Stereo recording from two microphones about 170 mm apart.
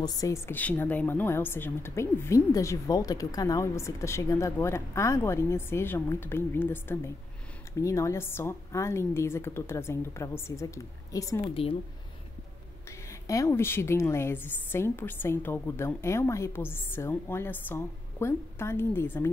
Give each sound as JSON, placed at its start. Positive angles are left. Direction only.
{"t": 0.0, "sound": "a woman's voice", "side_deg": 20}
{"t": 13.1, "sound": "a woman's voice", "side_deg": 20}